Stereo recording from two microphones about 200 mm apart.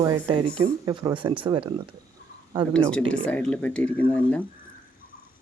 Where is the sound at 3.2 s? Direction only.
5° left (ahead or behind).